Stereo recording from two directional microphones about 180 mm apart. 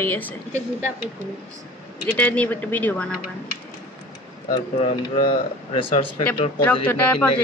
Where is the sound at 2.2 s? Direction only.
10° left (ahead or behind).